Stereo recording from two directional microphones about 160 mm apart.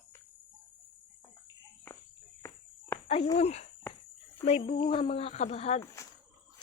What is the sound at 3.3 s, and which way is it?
Speech, 40° left (ahead or behind).